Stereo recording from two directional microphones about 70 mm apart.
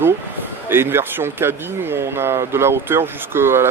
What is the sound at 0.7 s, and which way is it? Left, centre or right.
Speech, right.